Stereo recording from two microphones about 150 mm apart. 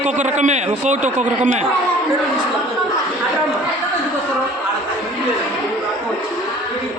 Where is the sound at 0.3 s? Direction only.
50° right (ahead or behind).